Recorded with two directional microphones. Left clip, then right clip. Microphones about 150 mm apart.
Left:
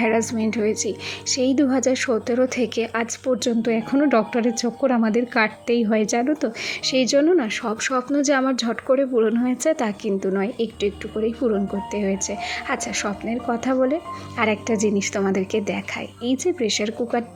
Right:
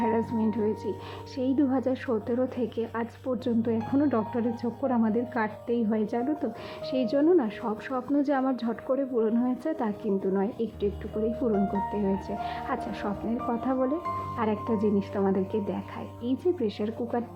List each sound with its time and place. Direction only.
0.0 s a woman's voice: 20° left (ahead or behind)
3.3 s a woman's voice: 15° left (ahead or behind)
3.9 s a woman's voice: 30° left (ahead or behind)
11.9 s a woman's voice: 10° left (ahead or behind)